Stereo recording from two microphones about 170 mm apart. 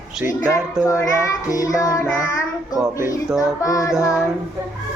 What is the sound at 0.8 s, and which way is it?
Child singing, 20° left (ahead or behind).